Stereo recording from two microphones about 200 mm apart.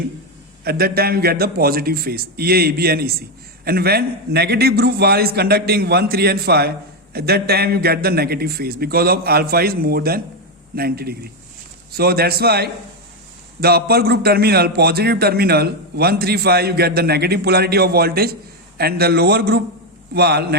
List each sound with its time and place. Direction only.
0.6 s a man's voice: 50° right (ahead or behind)